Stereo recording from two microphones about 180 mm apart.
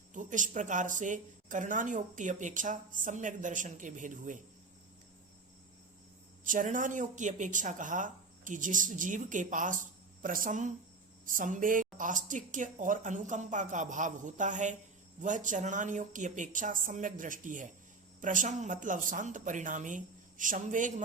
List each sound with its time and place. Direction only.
0.1 s speech: 45° right (ahead or behind)
6.4 s speech: 45° right (ahead or behind)